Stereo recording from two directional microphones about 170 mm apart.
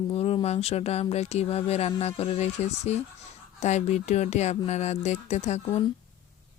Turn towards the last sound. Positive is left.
turn(degrees=40)  # may be behind; listen again after turning